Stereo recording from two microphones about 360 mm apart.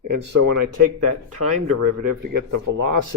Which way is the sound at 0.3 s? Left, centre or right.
Right.